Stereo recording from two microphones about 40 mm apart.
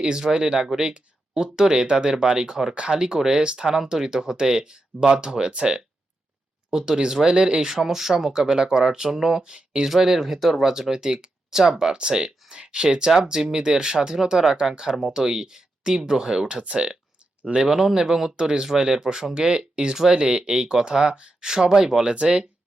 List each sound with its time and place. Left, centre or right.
0.0 s speech: centre
7.7 s speech: centre
9.9 s speech: centre